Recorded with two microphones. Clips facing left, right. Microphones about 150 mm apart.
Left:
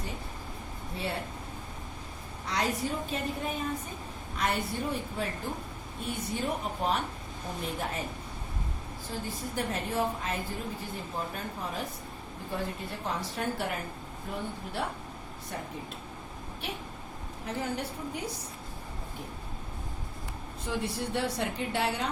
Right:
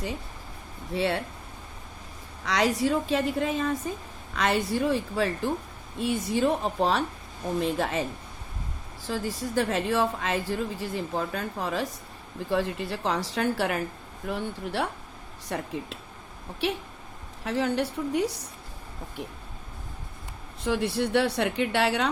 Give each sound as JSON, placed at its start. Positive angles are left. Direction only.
{"t": 0.9, "sound": "a woman's voice", "side_deg": -90}
{"t": 2.4, "sound": "a woman's voice", "side_deg": -90}
{"t": 9.0, "sound": "a woman's voice", "side_deg": -90}
{"t": 17.4, "sound": "a woman's voice", "side_deg": -80}
{"t": 20.7, "sound": "a woman's voice", "side_deg": -70}